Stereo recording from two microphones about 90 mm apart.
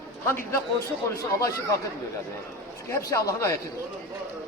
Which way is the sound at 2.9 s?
35° left (ahead or behind).